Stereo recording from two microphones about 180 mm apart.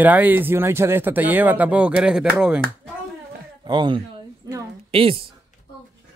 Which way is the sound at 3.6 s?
25° right (ahead or behind).